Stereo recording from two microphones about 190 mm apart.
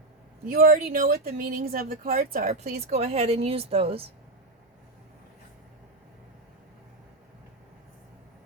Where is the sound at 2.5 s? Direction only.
35° right (ahead or behind).